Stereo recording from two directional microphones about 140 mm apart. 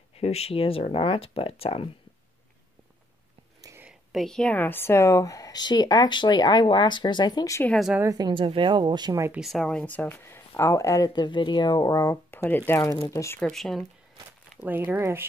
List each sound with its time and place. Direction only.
0.1 s speech: 45° left (ahead or behind)
4.1 s speech: centre (ahead or behind); by 7.6 s 25° left (ahead or behind)
7.6 s speech: 5° left (ahead or behind)
8.1 s speech: 30° right (ahead or behind)
9.3 s speech: centre (ahead or behind); by 13.4 s 20° left (ahead or behind)
13.4 s speech: centre (ahead or behind)
14.6 s speech: 15° right (ahead or behind)